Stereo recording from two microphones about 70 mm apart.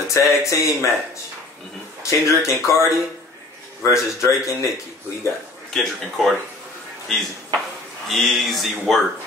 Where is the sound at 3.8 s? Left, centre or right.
Left.